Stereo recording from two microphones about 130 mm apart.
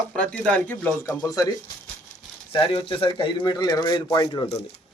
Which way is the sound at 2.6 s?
45° left (ahead or behind).